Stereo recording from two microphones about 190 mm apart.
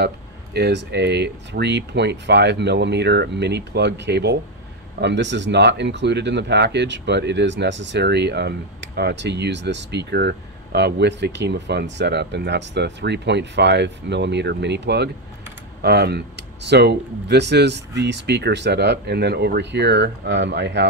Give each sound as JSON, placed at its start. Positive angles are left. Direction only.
{"t": 0.0, "sound": "speech", "side_deg": -60}